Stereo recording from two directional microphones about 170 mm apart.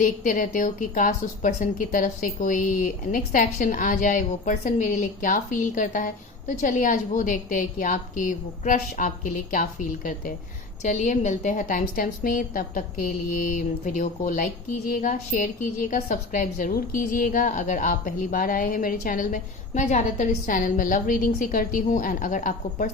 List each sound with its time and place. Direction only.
0.0 s a woman's voice: 50° left (ahead or behind)